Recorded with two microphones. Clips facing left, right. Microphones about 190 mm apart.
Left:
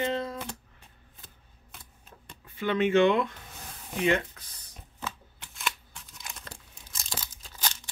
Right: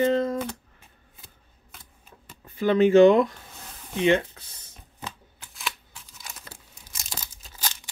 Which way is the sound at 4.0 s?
30° right (ahead or behind).